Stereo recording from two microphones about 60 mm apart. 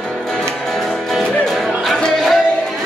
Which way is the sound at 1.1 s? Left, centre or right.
Centre.